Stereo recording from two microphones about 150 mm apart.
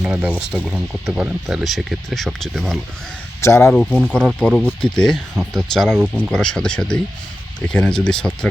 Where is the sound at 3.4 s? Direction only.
20° left (ahead or behind).